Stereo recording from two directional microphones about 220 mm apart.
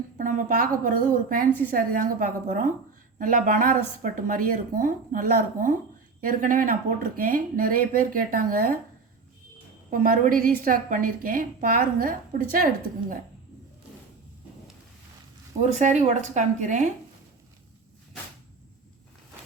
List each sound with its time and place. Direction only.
0.2 s a woman's voice: 35° right (ahead or behind)
9.9 s a woman's voice: 40° right (ahead or behind)
15.7 s a woman's voice: 35° right (ahead or behind)